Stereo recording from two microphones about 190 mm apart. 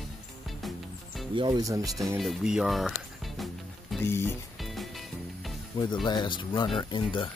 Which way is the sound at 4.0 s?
15° left (ahead or behind).